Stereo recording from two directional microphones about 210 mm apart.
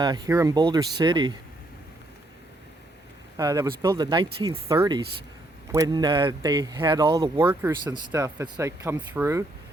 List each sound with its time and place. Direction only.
0.0 s speech: 20° right (ahead or behind)
3.3 s speech: 15° right (ahead or behind)